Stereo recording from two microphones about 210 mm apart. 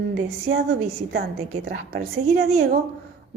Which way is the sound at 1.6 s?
45° right (ahead or behind).